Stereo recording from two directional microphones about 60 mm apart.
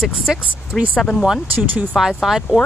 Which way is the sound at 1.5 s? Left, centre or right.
Right.